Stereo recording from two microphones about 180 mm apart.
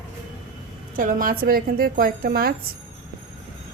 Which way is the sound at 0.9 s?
45° right (ahead or behind).